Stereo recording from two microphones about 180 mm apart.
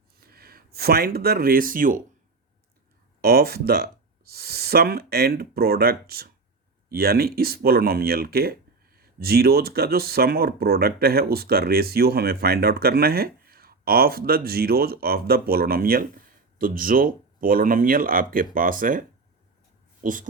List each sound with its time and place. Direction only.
0.2 s speech: 55° right (ahead or behind)
3.2 s speech: 60° right (ahead or behind)